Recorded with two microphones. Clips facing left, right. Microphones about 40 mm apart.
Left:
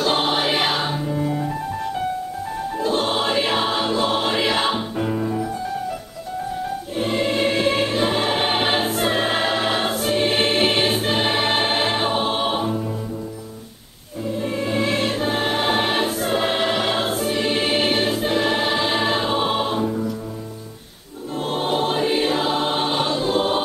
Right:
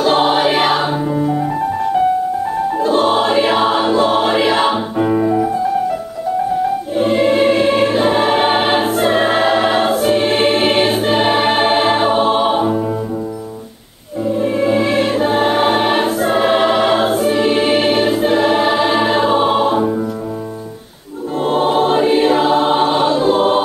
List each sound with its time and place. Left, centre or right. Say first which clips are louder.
0.0 s choir: right 7 dB; centre
0.9 s music: right 7 dB; centre
2.8 s choir: right 7 dB; centre
5.1 s music: right 11 dB; right
7.0 s choir: right 8 dB; centre
12.5 s music: right 8 dB; right
14.2 s music: right 9 dB; centre
18.0 s choir: right 7 dB; centre
19.8 s music: right 6 dB; right
21.4 s choir: right 8 dB; centre